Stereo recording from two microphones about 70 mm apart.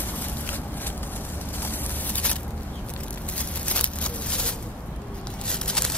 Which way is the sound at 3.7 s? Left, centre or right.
Centre.